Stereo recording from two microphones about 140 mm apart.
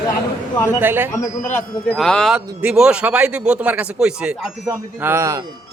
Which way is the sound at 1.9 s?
5° left (ahead or behind).